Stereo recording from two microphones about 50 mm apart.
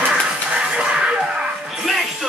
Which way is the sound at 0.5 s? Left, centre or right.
Right.